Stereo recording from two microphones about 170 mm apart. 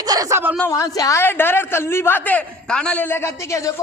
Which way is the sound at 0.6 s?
15° left (ahead or behind).